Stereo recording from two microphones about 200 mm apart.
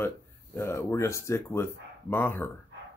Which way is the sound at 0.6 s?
15° left (ahead or behind).